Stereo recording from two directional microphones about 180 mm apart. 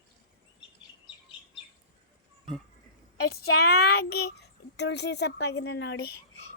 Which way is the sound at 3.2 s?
60° left (ahead or behind).